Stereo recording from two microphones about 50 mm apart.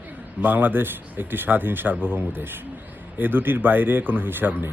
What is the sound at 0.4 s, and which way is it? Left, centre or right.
Speech, right.